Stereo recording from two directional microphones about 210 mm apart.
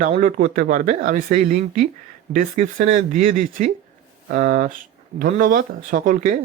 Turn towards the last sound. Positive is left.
turn(degrees=-40)  # may be behind; listen again after turning